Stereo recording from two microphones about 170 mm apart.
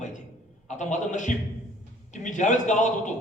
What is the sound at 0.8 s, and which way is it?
A man's voice, 45° left (ahead or behind).